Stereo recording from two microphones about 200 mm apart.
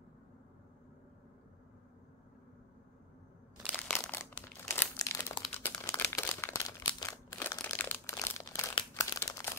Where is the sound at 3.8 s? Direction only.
10° left (ahead or behind).